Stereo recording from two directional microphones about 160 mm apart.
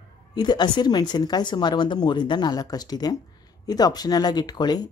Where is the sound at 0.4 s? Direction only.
25° left (ahead or behind).